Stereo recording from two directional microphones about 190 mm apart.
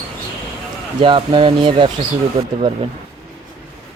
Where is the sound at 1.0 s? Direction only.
25° right (ahead or behind).